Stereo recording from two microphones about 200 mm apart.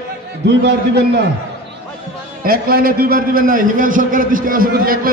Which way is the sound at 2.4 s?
45° right (ahead or behind).